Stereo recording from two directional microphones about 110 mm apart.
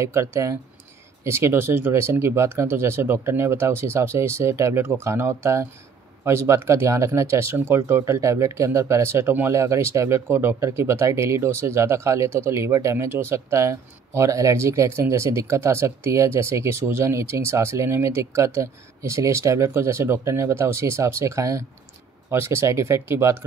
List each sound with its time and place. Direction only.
0.0 s speech: 25° right (ahead or behind)